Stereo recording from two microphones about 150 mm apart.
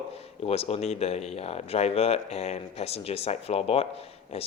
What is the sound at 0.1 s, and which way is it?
Speech, 40° left (ahead or behind).